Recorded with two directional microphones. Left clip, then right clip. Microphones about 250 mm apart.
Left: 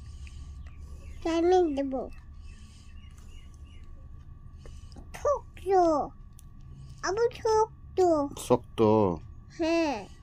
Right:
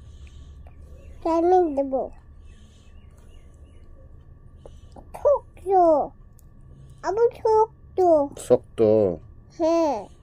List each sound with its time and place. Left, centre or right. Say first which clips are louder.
1.2 s a child's voice: right 5 dB; centre
5.1 s cough: right 8 dB; centre
5.9 s a child's voice: right 7 dB; centre
8.4 s speech: right 6 dB; left
9.5 s a child's voice: right 6 dB; centre